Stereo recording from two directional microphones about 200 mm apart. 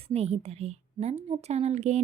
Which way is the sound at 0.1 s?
30° right (ahead or behind).